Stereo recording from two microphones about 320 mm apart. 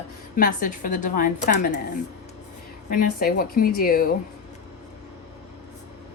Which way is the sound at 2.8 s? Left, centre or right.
Left.